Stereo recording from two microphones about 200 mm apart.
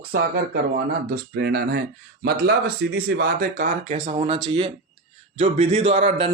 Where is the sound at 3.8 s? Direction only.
30° right (ahead or behind).